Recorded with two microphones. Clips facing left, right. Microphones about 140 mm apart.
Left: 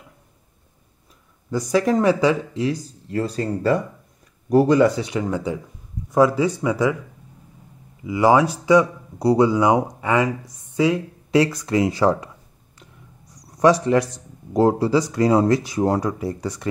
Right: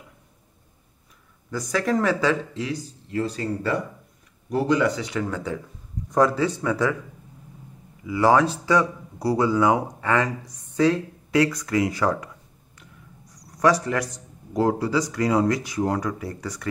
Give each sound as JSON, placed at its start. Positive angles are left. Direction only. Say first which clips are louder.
{"t": 1.5, "sound": "speech", "louder": "left 5 dB", "side_deg": 20}
{"t": 2.6, "sound": "speech", "louder": "left 6 dB", "side_deg": 35}
{"t": 8.0, "sound": "speech", "louder": "left 2 dB", "side_deg": 15}
{"t": 11.3, "sound": "speech", "louder": "left 3 dB", "side_deg": 25}
{"t": 13.6, "sound": "speech", "louder": "left 5 dB", "side_deg": 25}